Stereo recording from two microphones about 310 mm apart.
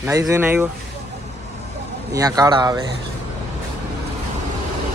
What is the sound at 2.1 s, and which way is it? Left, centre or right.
Speech, centre.